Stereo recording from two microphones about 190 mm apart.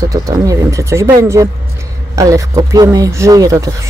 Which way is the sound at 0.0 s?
15° right (ahead or behind).